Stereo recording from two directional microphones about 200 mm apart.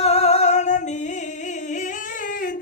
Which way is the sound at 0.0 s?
30° left (ahead or behind).